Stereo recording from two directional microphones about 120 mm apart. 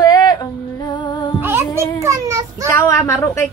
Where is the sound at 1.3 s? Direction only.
15° right (ahead or behind).